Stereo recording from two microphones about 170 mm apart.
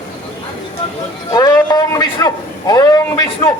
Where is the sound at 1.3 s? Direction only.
25° left (ahead or behind).